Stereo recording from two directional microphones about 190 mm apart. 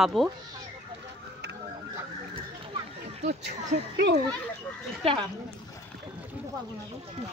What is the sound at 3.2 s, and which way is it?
Speech, 35° right (ahead or behind).